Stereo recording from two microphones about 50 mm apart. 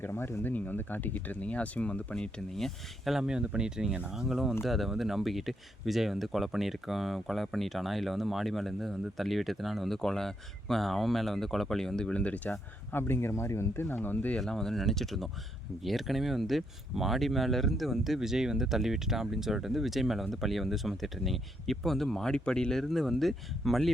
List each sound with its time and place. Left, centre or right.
0.0 s speech: left
0.5 s speech: left
2.6 s speech: centre
3.2 s speech: centre; by 12.5 s left
12.9 s speech: left
13.8 s speech: left
14.4 s speech: centre